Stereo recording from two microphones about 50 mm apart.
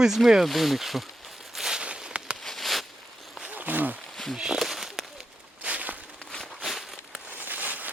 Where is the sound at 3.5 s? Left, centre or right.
Right.